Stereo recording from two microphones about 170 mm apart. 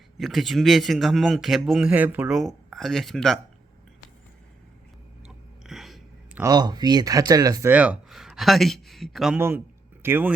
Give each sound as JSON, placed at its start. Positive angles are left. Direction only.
{"t": 0.2, "sound": "speech", "side_deg": 0}
{"t": 5.6, "sound": "a sound", "side_deg": 0}
{"t": 6.4, "sound": "speech", "side_deg": -25}
{"t": 7.7, "sound": "speech", "side_deg": -5}
{"t": 10.0, "sound": "speech", "side_deg": -15}